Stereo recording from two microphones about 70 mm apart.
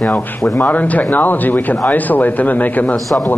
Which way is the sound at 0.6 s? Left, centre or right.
Left.